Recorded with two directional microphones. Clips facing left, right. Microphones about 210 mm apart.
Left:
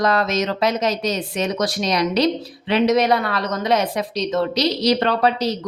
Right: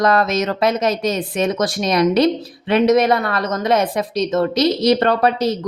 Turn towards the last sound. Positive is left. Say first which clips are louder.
# right 3 dB
turn(degrees=-50)  # may be behind; listen again after turning